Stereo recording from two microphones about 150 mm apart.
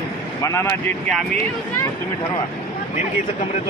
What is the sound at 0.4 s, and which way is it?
Speech, 20° left (ahead or behind).